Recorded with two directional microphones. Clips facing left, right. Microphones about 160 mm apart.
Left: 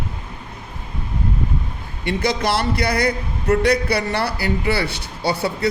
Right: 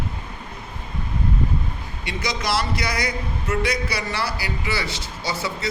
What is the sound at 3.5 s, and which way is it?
Speech, 35° left (ahead or behind).